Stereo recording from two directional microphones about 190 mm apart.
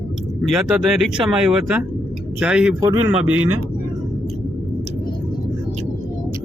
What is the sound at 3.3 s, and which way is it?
Speech, 90° right.